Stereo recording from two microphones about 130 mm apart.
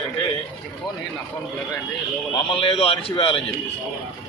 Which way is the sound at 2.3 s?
40° left (ahead or behind).